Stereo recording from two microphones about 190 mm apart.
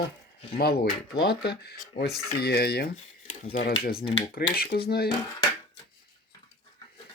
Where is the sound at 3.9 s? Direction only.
30° left (ahead or behind).